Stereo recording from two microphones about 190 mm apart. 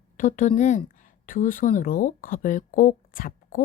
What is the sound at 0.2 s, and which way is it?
Speech, 45° left (ahead or behind).